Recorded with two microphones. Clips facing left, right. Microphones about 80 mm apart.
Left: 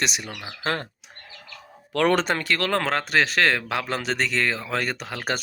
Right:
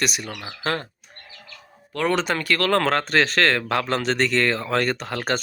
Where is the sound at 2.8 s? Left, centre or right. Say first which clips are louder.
Right 2 dB; centre.